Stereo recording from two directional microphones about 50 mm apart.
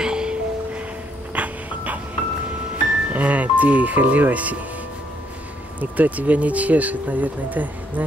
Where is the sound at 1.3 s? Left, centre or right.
Right.